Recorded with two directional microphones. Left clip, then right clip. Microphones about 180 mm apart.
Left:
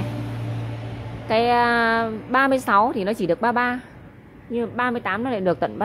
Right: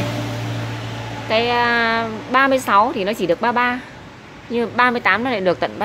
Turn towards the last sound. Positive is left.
turn(degrees=15)  # may be behind; listen again after turning